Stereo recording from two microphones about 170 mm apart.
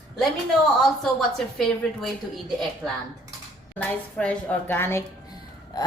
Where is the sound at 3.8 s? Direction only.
5° left (ahead or behind).